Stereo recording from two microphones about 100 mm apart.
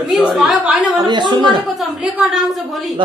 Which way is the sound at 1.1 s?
45° right (ahead or behind).